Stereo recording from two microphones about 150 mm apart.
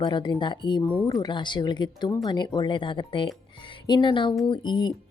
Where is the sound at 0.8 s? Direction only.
10° left (ahead or behind).